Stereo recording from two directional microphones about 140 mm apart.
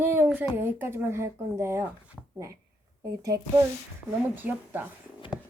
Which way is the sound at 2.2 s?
10° left (ahead or behind).